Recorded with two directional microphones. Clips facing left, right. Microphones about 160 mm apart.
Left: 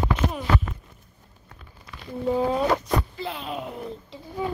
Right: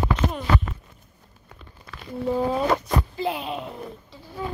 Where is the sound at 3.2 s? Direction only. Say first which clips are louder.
Right 6 dB; 15° right (ahead or behind).